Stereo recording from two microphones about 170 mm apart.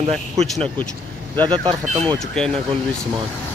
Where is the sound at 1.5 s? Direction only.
30° right (ahead or behind).